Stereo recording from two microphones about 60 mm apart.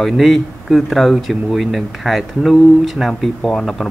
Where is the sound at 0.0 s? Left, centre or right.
Centre.